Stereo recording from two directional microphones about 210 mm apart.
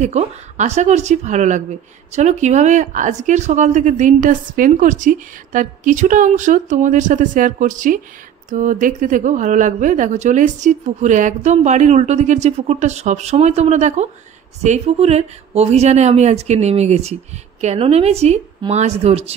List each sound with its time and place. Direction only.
0.0 s speech: 30° right (ahead or behind)